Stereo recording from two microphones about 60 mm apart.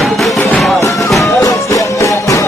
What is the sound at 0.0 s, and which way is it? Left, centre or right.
Music, centre.